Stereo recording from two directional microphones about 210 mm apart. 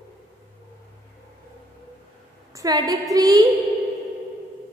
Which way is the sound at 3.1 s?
15° right (ahead or behind).